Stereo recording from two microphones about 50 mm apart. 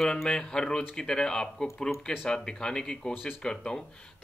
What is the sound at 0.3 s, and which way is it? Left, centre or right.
Speech, centre.